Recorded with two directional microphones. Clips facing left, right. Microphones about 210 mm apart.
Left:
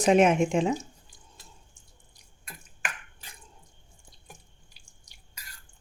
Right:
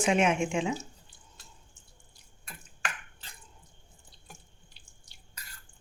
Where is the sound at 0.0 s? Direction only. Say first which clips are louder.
Left 5 dB; 40° left (ahead or behind).